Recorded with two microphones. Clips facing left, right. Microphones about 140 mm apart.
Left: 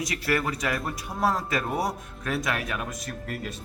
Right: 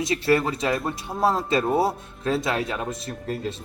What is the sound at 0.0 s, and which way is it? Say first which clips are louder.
A man's voice: right 6 dB; 25° right (ahead or behind).